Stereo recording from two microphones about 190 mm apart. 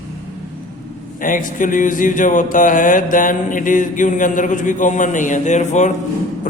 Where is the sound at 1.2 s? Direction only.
45° left (ahead or behind).